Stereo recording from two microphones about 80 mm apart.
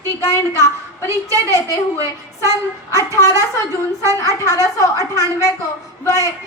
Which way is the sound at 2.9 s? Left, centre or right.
Left.